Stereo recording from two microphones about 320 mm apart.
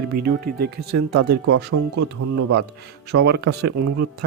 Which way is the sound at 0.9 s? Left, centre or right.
Right.